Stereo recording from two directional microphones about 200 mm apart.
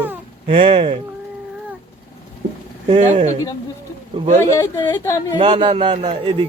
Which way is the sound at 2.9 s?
30° right (ahead or behind).